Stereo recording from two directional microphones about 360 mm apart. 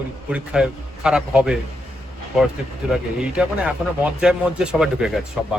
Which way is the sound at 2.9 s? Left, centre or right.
Centre.